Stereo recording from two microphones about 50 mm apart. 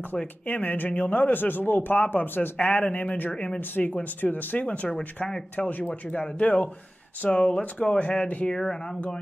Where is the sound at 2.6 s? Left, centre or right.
Left.